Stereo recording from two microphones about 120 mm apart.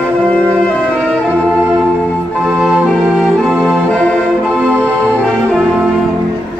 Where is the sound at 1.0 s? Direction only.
10° left (ahead or behind); by 3.8 s 10° right (ahead or behind).